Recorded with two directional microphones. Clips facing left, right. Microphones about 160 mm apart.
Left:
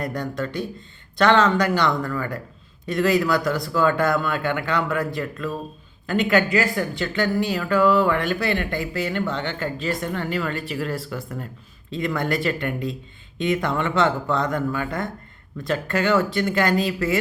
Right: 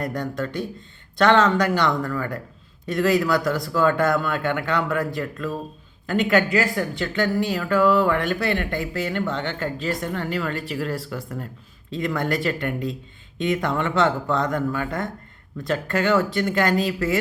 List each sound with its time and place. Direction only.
0.1 s speech: 50° right (ahead or behind)
6.1 s speech: 45° right (ahead or behind)